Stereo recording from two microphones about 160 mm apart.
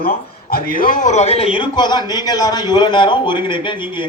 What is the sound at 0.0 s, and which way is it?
Speech, 70° left (ahead or behind).